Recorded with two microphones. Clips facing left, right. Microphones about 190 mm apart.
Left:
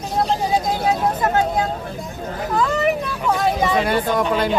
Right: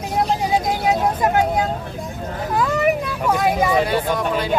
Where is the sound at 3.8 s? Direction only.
50° left (ahead or behind).